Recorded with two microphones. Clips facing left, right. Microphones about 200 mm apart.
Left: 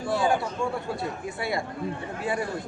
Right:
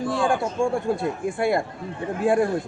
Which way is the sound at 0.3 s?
50° right (ahead or behind).